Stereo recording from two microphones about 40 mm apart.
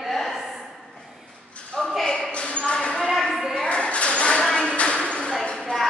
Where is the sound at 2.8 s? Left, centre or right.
Left.